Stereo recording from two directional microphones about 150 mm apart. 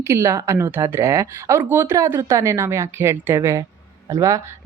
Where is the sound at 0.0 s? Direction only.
20° right (ahead or behind).